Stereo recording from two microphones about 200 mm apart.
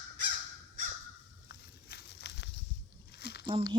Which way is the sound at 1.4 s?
55° left (ahead or behind).